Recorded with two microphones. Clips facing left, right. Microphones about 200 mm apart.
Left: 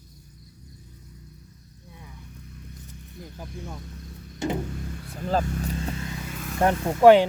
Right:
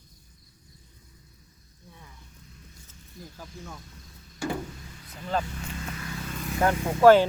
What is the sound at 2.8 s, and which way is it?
Snake, 20° left (ahead or behind).